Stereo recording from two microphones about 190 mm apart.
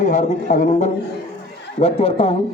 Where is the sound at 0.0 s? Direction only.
40° left (ahead or behind).